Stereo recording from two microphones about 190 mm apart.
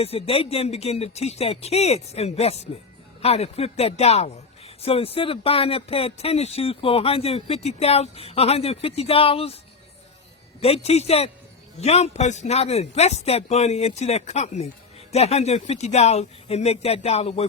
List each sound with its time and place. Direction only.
0.0 s speech: 30° left (ahead or behind)
10.6 s speech: 30° left (ahead or behind)